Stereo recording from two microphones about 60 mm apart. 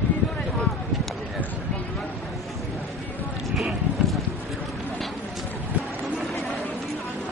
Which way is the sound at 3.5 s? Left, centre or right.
Centre.